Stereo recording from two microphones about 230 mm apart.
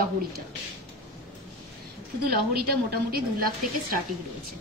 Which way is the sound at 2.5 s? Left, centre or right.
Right.